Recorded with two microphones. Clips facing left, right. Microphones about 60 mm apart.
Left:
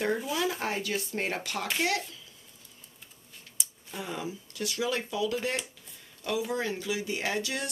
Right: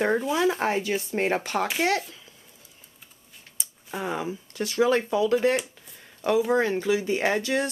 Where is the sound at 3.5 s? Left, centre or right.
Right.